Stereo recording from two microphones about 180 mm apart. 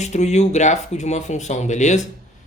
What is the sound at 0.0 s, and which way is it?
Speech, 40° left (ahead or behind).